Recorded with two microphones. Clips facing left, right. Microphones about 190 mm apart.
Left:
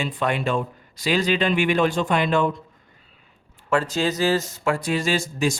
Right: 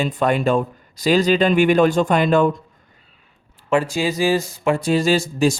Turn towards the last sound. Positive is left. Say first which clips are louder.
# right 6 dB
turn(degrees=-35)  # may be behind; listen again after turning